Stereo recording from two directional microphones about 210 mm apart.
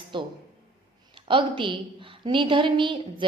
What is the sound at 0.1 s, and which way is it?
A woman's voice, 20° right (ahead or behind).